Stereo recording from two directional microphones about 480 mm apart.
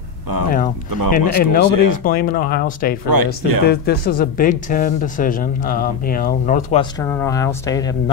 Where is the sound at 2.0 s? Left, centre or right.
Centre.